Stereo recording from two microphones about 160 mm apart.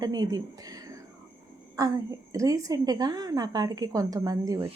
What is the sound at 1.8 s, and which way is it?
A woman's voice, 25° right (ahead or behind).